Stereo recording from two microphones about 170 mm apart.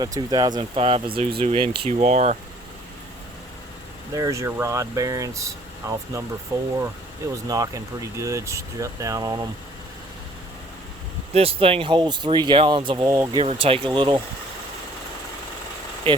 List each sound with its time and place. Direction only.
0.0 s speech: 25° right (ahead or behind)
0.8 s speech: 35° right (ahead or behind)
4.1 s speech: 20° right (ahead or behind)
11.3 s speech: 35° right (ahead or behind)
13.1 s speech: 15° right (ahead or behind)
13.4 s speech: 35° right (ahead or behind)